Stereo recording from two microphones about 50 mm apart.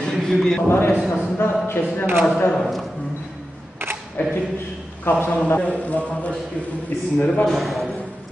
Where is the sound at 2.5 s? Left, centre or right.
Centre.